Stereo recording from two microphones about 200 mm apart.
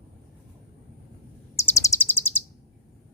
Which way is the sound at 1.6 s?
15° left (ahead or behind).